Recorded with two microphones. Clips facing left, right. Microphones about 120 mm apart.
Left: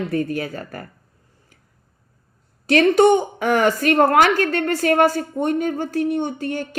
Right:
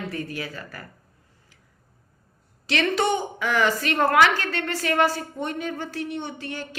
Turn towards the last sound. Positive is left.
turn(degrees=50)  # may be behind; listen again after turning